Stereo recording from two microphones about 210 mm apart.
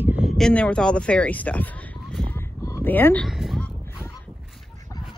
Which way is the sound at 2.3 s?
10° left (ahead or behind).